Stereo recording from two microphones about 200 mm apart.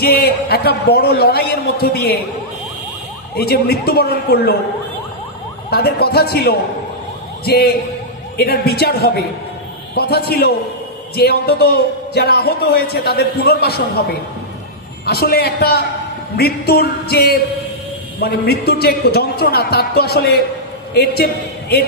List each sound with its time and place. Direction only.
0.0 s a man's voice: 50° left (ahead or behind)
3.3 s a man's voice: 50° left (ahead or behind)
5.7 s a man's voice: 55° left (ahead or behind)
15.0 s a man's voice: 50° left (ahead or behind)